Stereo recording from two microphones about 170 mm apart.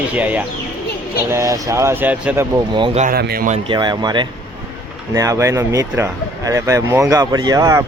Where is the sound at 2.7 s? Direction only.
30° right (ahead or behind).